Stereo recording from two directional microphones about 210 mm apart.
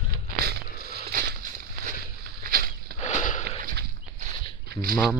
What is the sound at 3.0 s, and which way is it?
Sniff, 35° left (ahead or behind).